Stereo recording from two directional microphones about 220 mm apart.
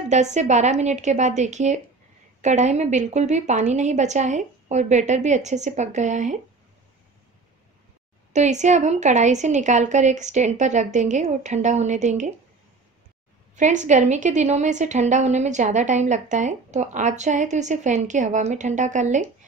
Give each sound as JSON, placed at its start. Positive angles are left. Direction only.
{"t": 0.1, "sound": "a woman's voice", "side_deg": -30}
{"t": 8.3, "sound": "a woman's voice", "side_deg": -30}
{"t": 13.6, "sound": "a woman's voice", "side_deg": -35}